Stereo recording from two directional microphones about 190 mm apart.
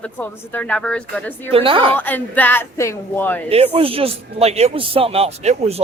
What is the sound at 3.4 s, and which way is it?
A man's voice, 30° right (ahead or behind).